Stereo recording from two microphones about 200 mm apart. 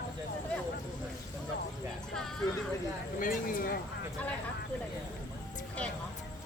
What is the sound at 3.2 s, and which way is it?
Speech, 45° left (ahead or behind).